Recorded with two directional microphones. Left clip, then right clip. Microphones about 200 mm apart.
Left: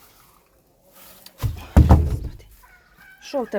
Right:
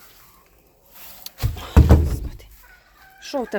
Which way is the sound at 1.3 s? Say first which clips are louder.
Right 4 dB; 20° right (ahead or behind).